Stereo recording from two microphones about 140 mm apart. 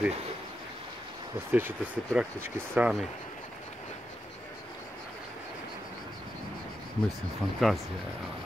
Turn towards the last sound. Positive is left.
turn(degrees=0)  # may be behind; listen again after turning